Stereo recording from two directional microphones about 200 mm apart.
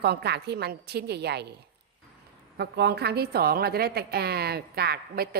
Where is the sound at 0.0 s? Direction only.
55° right (ahead or behind).